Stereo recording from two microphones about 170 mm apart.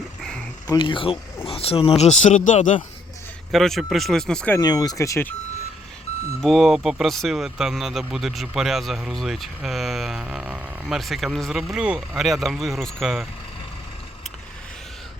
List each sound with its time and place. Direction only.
0.7 s speech: 30° left (ahead or behind); by 2.7 s 45° left (ahead or behind)
3.5 s speech: centre (ahead or behind)
4.5 s speech: 20° left (ahead or behind)
6.4 s speech: centre (ahead or behind)